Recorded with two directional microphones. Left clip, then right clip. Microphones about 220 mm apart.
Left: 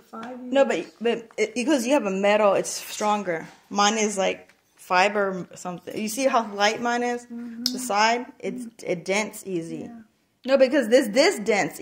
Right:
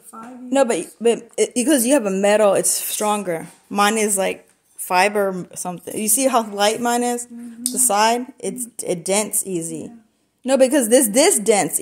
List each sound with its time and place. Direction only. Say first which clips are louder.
0.5 s a woman's voice: right 3 dB; 40° right (ahead or behind)